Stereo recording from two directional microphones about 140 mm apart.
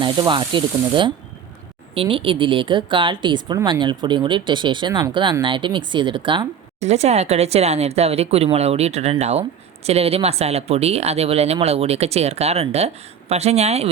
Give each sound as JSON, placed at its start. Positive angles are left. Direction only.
{"t": 0.0, "sound": "speech", "side_deg": -35}
{"t": 6.7, "sound": "speech", "side_deg": -50}